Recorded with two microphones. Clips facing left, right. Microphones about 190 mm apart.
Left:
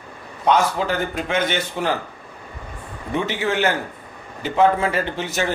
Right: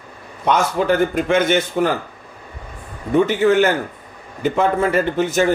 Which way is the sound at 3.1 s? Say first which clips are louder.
Right 8 dB; 45° right (ahead or behind).